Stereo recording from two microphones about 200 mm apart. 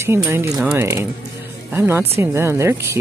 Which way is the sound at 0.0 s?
15° right (ahead or behind).